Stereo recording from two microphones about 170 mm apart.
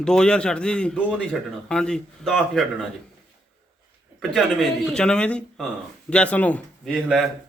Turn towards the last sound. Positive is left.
turn(degrees=0)  # may be behind; listen again after turning